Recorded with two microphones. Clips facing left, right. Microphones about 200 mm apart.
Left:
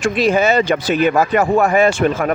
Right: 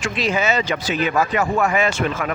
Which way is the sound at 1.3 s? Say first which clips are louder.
Left 6 dB; 40° left (ahead or behind).